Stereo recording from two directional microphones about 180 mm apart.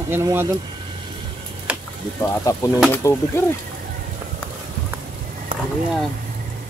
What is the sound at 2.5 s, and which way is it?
Speech, 15° left (ahead or behind).